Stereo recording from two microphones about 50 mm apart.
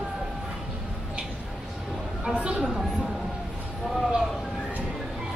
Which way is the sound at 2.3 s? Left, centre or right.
Right.